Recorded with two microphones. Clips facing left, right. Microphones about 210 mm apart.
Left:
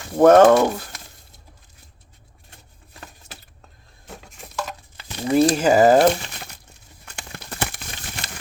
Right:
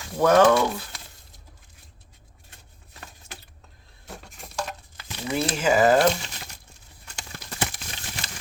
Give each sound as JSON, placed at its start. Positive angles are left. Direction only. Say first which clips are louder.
{"t": 0.2, "sound": "speech", "louder": "left 6 dB", "side_deg": 50}
{"t": 4.2, "sound": "a sound", "louder": "left 2 dB", "side_deg": 0}
{"t": 4.9, "sound": "speech", "louder": "left 10 dB", "side_deg": 35}
{"t": 7.0, "sound": "crumpling", "louder": "left 3 dB", "side_deg": 60}